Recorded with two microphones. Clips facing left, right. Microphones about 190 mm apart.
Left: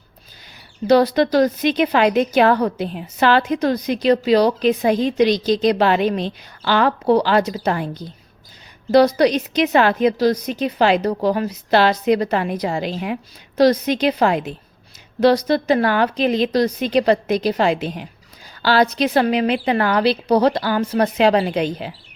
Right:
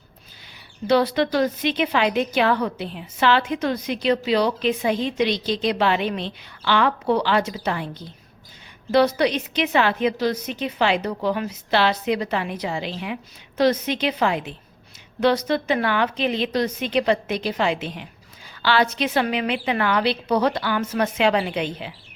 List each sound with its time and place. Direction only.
0.9 s a woman's voice: 40° left (ahead or behind)